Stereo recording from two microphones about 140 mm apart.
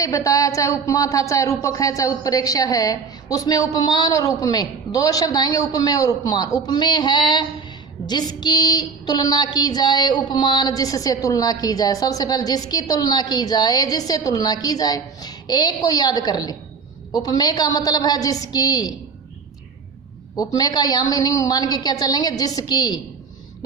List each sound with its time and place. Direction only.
0.0 s a woman's voice: 25° left (ahead or behind)
20.3 s a woman's voice: 25° left (ahead or behind)